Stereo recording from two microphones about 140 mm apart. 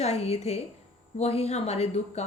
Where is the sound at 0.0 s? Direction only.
50° left (ahead or behind).